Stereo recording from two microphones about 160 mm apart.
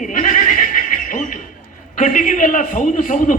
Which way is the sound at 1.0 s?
55° left (ahead or behind).